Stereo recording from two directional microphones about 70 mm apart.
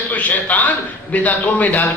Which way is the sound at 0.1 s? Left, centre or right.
Left.